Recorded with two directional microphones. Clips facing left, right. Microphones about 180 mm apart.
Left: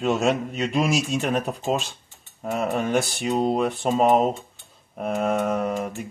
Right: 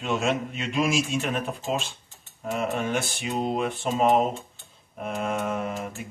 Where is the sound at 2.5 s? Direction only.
40° left (ahead or behind).